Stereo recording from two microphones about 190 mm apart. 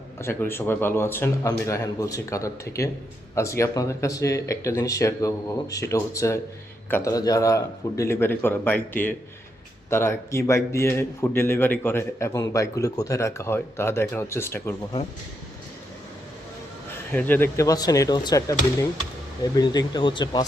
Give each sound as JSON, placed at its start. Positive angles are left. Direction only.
{"t": 0.2, "sound": "a man's voice", "side_deg": 15}
{"t": 17.1, "sound": "a man's voice", "side_deg": 10}